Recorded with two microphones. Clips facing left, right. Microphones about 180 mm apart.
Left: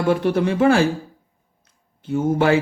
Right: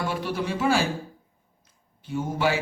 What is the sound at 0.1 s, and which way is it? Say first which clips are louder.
Speech: left 10 dB; 55° left (ahead or behind).